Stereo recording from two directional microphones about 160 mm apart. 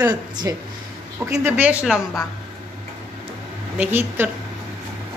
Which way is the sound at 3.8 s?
10° right (ahead or behind).